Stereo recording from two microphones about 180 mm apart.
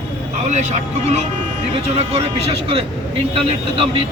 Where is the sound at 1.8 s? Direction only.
35° right (ahead or behind).